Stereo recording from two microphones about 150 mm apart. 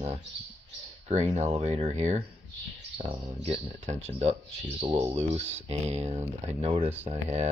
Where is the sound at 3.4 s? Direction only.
45° right (ahead or behind).